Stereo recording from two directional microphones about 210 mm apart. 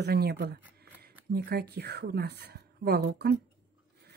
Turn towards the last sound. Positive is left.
turn(degrees=-55)  # may be behind; listen again after turning